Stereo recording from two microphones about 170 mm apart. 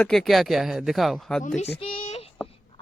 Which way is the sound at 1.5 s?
40° left (ahead or behind).